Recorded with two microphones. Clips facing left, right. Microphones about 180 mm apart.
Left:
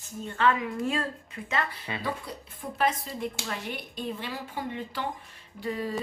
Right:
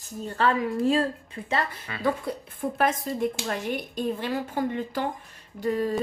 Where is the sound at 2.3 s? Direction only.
55° right (ahead or behind).